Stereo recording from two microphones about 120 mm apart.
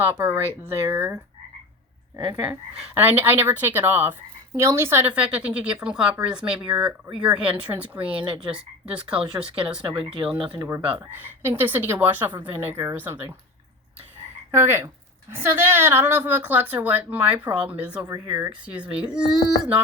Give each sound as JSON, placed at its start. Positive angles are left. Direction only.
{"t": 0.0, "sound": "a woman's voice", "side_deg": -15}
{"t": 2.3, "sound": "a woman's voice", "side_deg": -10}
{"t": 8.1, "sound": "speech", "side_deg": -45}
{"t": 8.4, "sound": "a woman's voice", "side_deg": -10}
{"t": 9.8, "sound": "speech", "side_deg": -45}
{"t": 11.1, "sound": "a woman's voice", "side_deg": -15}
{"t": 14.5, "sound": "a woman's voice", "side_deg": -20}
{"t": 18.1, "sound": "speech", "side_deg": -30}
{"t": 18.6, "sound": "a woman's voice", "side_deg": -10}